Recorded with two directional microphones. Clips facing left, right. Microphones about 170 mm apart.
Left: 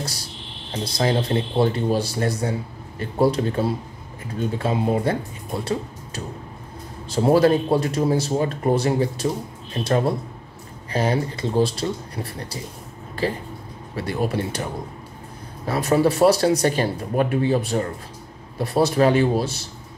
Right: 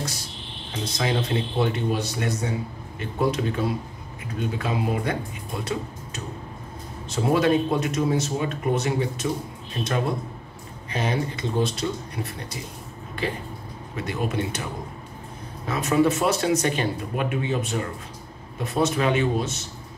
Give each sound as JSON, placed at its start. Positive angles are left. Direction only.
{"t": 0.9, "sound": "speech", "side_deg": 35}
{"t": 13.9, "sound": "speech", "side_deg": 35}